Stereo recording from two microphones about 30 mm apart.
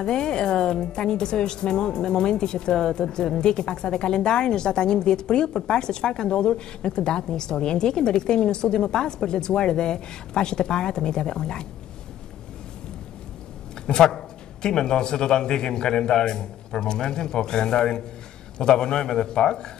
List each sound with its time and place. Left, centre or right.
0.0 s a woman's voice: left
13.9 s a woman's voice: left